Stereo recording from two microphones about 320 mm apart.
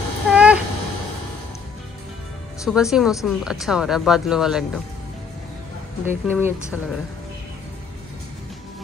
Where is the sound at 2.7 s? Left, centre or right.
Centre.